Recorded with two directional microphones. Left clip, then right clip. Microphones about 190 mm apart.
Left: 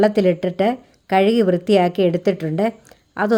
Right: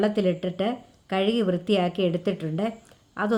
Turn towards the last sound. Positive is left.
turn(degrees=40)  # may be behind; listen again after turning